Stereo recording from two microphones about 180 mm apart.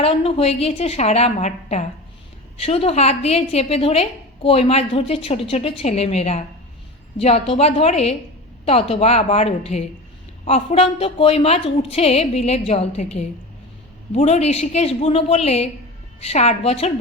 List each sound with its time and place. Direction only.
0.0 s a woman's voice: 30° left (ahead or behind)